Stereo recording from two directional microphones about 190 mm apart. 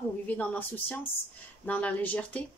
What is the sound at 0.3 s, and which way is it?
A woman's voice, 10° left (ahead or behind).